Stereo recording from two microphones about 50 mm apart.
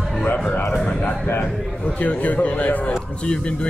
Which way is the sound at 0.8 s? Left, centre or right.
Left.